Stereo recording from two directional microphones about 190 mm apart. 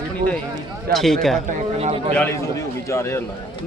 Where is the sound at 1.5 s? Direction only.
35° right (ahead or behind).